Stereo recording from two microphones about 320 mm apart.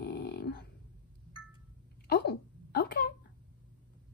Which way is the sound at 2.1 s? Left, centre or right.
Left.